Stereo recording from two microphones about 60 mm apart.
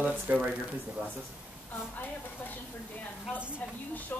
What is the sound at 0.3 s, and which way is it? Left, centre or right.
Speech, right.